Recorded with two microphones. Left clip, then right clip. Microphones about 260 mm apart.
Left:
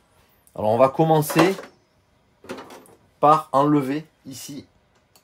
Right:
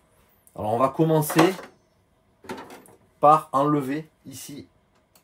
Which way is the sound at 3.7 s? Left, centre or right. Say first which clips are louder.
Left 3 dB; left.